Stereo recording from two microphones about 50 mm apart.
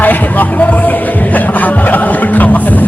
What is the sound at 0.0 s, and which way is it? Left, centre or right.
Music, left.